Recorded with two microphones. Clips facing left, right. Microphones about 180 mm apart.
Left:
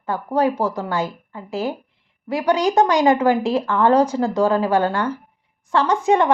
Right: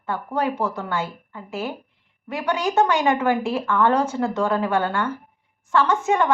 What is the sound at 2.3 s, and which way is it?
A woman's voice, 35° left (ahead or behind).